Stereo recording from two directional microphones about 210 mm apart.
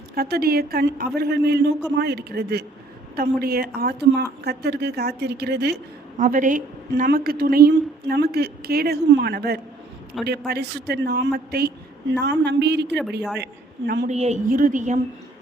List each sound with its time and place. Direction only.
0.1 s a woman's voice: 50° right (ahead or behind)
6.1 s a woman's voice: 40° right (ahead or behind)
14.1 s a woman's voice: 30° right (ahead or behind)